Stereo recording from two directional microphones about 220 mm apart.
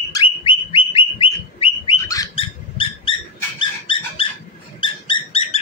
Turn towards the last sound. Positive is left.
turn(degrees=25)  # may be behind; listen again after turning